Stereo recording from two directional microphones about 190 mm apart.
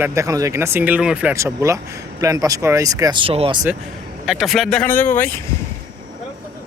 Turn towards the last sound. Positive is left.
turn(degrees=10)  # may be behind; listen again after turning